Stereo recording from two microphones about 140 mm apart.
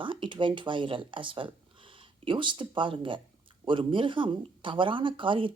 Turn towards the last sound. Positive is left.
turn(degrees=-35)  # may be behind; listen again after turning